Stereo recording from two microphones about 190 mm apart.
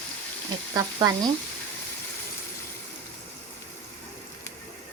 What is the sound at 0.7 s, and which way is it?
Speech, 20° right (ahead or behind).